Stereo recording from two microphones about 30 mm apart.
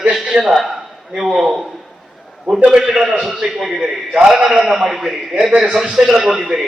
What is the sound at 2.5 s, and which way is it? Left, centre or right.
Speech, right.